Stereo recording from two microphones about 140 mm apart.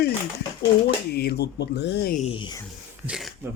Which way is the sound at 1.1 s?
90° left.